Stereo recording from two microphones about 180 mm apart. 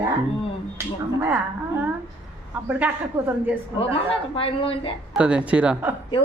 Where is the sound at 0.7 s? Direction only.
15° right (ahead or behind).